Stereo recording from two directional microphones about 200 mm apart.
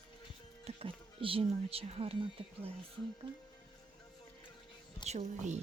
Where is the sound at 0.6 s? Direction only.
30° right (ahead or behind).